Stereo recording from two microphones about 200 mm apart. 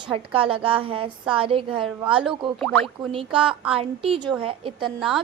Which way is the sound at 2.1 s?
5° right (ahead or behind).